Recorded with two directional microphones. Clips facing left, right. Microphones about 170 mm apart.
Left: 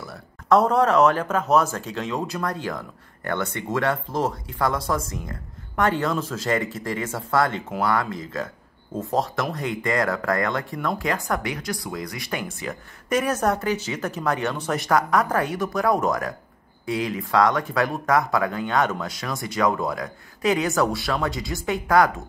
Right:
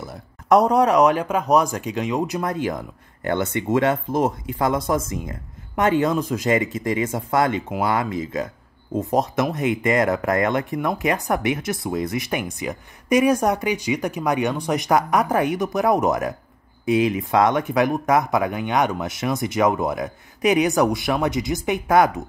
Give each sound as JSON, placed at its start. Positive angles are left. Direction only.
{"t": 0.0, "sound": "speech", "side_deg": -20}